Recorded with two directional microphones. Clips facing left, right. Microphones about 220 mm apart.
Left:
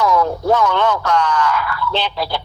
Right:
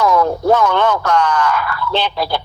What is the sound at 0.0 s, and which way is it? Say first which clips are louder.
A man's voice: right 2 dB; 50° right (ahead or behind).